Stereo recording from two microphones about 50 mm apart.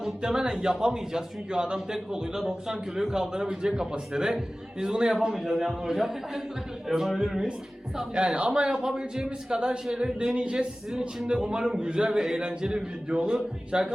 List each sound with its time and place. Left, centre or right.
0.0 s speech: centre